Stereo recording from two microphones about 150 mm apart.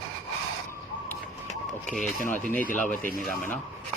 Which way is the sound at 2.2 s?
10° left (ahead or behind).